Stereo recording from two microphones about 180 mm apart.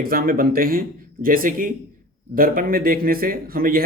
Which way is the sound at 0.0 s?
55° right (ahead or behind).